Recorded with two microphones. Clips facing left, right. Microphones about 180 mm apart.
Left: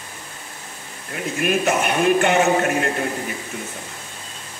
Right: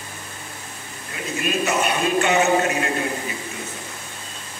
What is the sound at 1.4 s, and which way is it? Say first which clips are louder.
A man's voice: left 2 dB; 55° left (ahead or behind).